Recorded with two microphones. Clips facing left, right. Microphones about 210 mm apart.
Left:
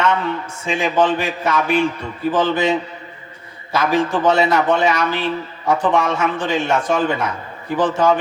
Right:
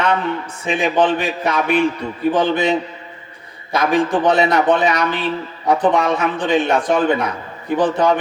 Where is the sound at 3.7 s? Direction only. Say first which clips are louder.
Right 1 dB; 15° right (ahead or behind).